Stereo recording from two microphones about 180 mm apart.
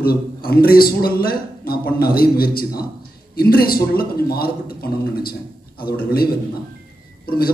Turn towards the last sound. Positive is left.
turn(degrees=55)  # may be behind; listen again after turning